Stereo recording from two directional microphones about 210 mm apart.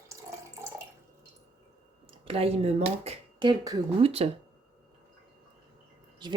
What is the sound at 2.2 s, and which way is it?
Speech, 25° right (ahead or behind).